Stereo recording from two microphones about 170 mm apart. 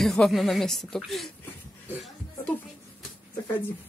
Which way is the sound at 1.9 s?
Centre (ahead or behind).